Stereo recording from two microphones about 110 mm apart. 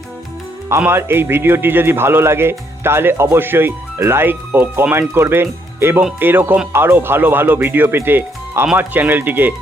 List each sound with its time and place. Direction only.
0.8 s speech: 20° right (ahead or behind)